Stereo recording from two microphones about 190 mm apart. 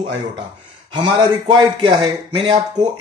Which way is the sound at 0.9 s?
25° right (ahead or behind).